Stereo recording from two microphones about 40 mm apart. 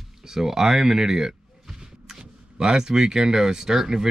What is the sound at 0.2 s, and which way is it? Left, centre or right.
Speech, centre.